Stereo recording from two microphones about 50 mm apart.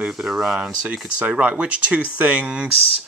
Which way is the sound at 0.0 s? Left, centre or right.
Centre.